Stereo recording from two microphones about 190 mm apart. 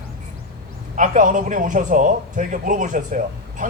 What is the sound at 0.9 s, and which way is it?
A man's voice, 45° right (ahead or behind).